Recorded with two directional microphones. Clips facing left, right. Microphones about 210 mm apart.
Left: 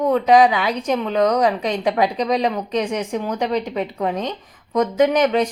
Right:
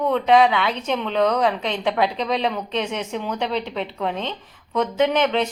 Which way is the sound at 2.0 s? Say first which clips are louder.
Left 1 dB; 40° left (ahead or behind).